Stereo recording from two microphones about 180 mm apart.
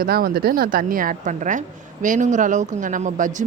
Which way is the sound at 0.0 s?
60° right (ahead or behind).